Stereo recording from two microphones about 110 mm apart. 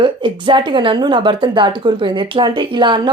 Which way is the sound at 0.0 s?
50° right (ahead or behind).